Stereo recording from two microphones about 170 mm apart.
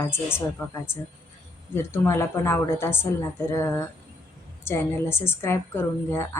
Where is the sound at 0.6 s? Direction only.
10° left (ahead or behind).